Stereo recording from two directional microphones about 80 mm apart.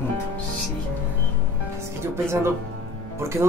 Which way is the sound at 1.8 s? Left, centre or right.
Right.